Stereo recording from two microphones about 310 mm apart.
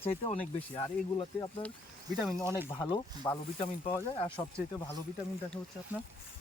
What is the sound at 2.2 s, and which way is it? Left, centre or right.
Speech, centre.